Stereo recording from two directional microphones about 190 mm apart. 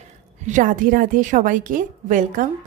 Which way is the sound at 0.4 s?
40° right (ahead or behind).